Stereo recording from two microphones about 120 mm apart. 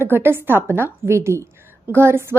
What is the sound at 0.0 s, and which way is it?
A woman's voice, 20° right (ahead or behind).